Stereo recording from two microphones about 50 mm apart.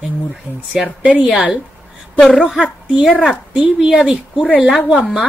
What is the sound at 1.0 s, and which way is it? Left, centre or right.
Speech, right.